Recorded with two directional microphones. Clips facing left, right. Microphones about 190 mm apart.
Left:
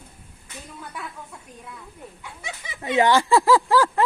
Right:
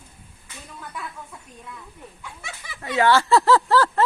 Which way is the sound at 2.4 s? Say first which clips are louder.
Left 5 dB; 20° left (ahead or behind).